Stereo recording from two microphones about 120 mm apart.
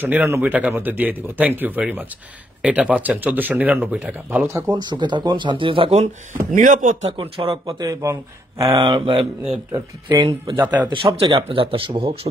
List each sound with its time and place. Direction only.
0.0 s speech: 15° right (ahead or behind)
4.3 s speech: 15° right (ahead or behind)
4.7 s a man's voice: 40° right (ahead or behind)
6.5 s speech: 90° right
7.1 s speech: 50° right (ahead or behind)
7.6 s a man's voice: 30° right (ahead or behind)
10.6 s speech: 15° right (ahead or behind)
10.9 s speech: 45° right (ahead or behind)